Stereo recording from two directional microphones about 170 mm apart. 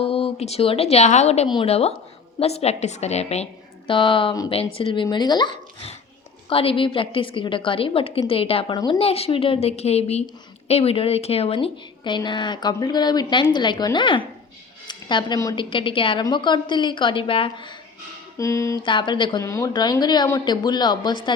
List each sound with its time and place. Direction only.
0.0 s a woman's voice: 35° left (ahead or behind)
18.3 s speech: 15° left (ahead or behind)
18.9 s a woman's voice: 30° left (ahead or behind)